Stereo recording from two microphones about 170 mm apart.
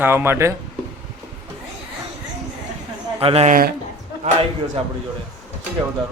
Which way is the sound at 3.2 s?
35° right (ahead or behind).